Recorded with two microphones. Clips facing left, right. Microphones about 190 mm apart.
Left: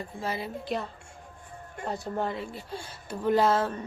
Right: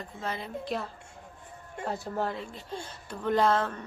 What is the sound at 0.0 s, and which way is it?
Speech, 10° left (ahead or behind).